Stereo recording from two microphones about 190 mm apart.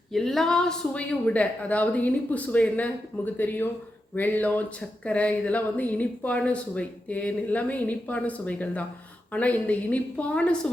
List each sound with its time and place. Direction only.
0.1 s speech: centre (ahead or behind)